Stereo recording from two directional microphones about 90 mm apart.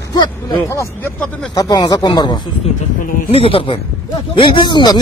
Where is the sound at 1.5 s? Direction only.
45° left (ahead or behind).